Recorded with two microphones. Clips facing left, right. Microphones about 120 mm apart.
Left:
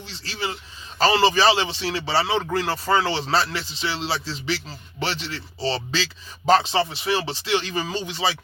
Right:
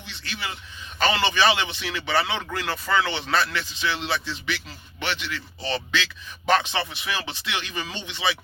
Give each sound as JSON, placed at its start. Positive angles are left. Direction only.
{"t": 0.1, "sound": "speech", "side_deg": 30}